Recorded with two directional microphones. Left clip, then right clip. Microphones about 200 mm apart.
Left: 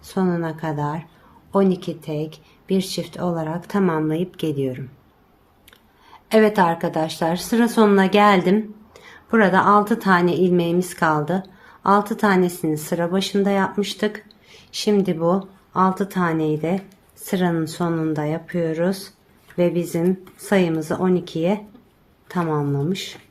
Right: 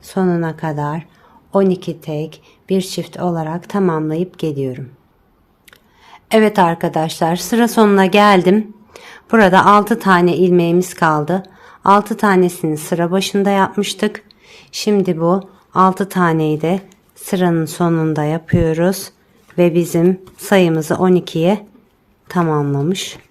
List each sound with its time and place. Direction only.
0.0 s a woman's voice: 35° right (ahead or behind)
6.1 s a woman's voice: 35° right (ahead or behind)